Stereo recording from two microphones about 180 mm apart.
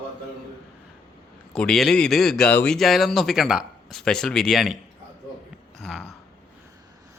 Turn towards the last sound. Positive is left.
turn(degrees=0)  # may be behind; listen again after turning